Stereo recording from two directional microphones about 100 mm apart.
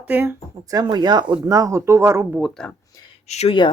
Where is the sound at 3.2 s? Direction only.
90° left.